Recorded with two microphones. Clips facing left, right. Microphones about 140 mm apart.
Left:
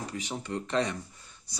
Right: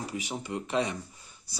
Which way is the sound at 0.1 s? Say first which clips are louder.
Even; 10° right (ahead or behind).